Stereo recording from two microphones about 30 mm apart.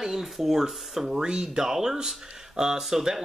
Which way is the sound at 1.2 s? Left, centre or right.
Right.